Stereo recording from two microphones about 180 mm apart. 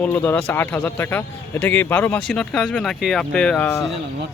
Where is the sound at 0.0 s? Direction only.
10° left (ahead or behind).